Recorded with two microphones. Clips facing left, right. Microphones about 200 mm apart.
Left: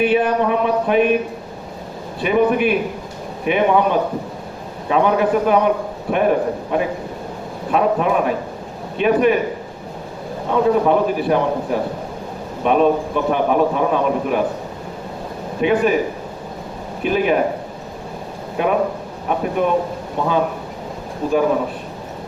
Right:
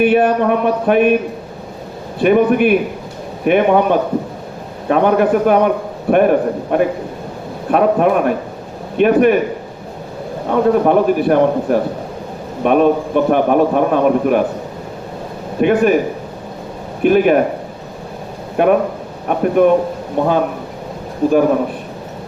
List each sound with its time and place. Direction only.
0.0 s a man's voice: 55° right (ahead or behind)
2.2 s a man's voice: 55° right (ahead or behind)
10.5 s a man's voice: 55° right (ahead or behind)
15.6 s a man's voice: 55° right (ahead or behind)
17.0 s a man's voice: 55° right (ahead or behind)
18.5 s a man's voice: 55° right (ahead or behind)